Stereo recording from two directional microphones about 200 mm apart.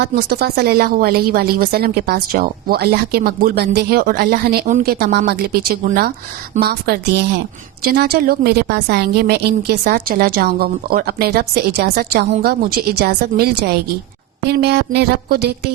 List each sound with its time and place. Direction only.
0.0 s a woman's voice: 50° right (ahead or behind)